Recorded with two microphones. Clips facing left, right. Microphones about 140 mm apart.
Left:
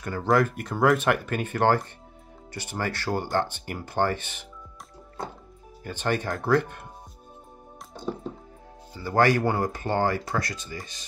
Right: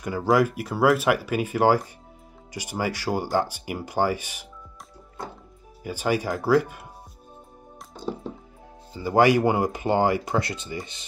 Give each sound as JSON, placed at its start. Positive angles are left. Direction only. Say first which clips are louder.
{"t": 0.0, "sound": "speech", "louder": "right 2 dB", "side_deg": -10}
{"t": 5.9, "sound": "speech", "louder": "right 3 dB", "side_deg": -10}
{"t": 8.9, "sound": "speech", "louder": "right 3 dB", "side_deg": -15}